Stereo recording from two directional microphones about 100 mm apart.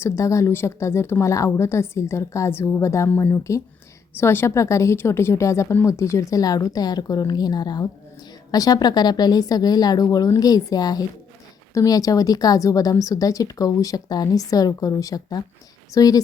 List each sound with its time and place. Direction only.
0.0 s a woman's voice: 30° left (ahead or behind)
3.1 s a woman's voice: 20° left (ahead or behind); by 16.2 s 35° left (ahead or behind)